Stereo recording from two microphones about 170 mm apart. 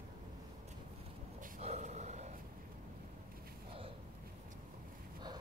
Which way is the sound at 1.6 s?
40° right (ahead or behind).